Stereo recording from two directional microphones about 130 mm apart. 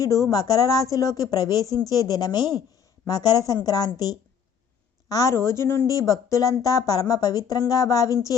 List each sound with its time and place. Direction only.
0.0 s a woman's voice: 25° left (ahead or behind)